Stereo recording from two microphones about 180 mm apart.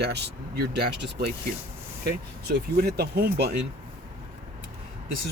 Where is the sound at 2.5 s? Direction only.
60° right (ahead or behind).